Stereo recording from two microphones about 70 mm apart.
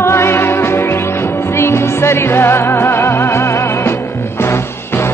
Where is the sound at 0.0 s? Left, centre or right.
Left.